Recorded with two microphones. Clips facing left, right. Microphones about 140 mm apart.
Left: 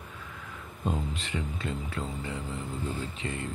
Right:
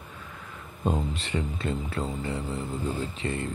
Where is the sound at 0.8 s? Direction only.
35° right (ahead or behind).